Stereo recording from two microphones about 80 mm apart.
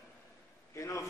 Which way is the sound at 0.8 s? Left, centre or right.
Left.